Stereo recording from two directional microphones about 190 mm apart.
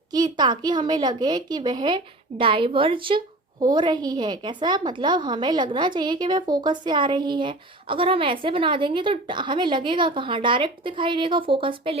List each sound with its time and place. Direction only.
0.1 s a woman's voice: 20° right (ahead or behind)